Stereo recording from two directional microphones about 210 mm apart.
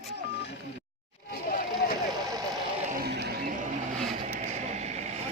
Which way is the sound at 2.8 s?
45° right (ahead or behind).